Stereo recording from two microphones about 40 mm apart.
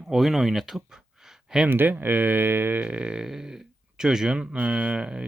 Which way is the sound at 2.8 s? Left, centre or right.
Right.